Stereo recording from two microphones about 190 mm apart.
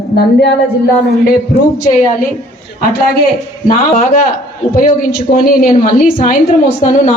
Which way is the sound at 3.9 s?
45° left (ahead or behind).